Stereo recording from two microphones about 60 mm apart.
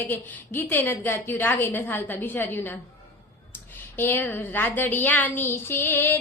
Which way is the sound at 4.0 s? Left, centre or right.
Left.